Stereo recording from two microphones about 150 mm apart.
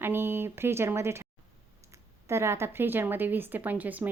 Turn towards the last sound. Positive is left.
turn(degrees=-10)  # may be behind; listen again after turning